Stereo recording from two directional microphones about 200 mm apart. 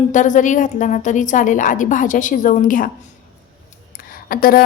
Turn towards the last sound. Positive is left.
turn(degrees=45)  # may be behind; listen again after turning